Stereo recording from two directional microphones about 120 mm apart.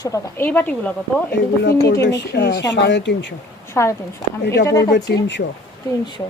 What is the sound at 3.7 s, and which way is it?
A woman's voice, 25° left (ahead or behind).